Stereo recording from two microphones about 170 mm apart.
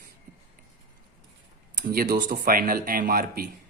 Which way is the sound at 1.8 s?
50° right (ahead or behind).